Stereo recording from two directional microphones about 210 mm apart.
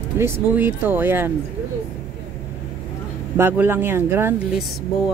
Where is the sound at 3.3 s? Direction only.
10° right (ahead or behind).